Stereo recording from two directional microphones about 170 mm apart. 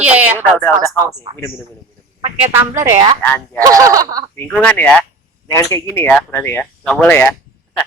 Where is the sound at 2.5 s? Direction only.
15° right (ahead or behind).